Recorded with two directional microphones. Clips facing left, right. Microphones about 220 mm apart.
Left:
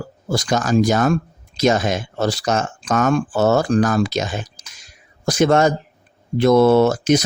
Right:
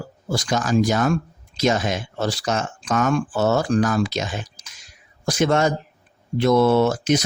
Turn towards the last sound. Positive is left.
turn(degrees=40)  # may be behind; listen again after turning